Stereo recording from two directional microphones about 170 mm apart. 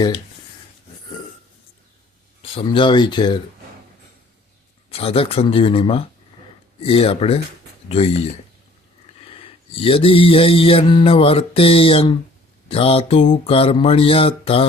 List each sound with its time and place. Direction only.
2.4 s speech: 30° left (ahead or behind)
4.9 s mantra: 35° left (ahead or behind)
9.7 s mantra: 35° left (ahead or behind)